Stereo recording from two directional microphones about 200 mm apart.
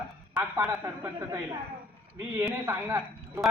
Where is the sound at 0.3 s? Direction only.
10° right (ahead or behind).